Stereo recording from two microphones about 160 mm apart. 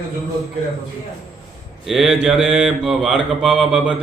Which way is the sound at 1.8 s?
Centre (ahead or behind).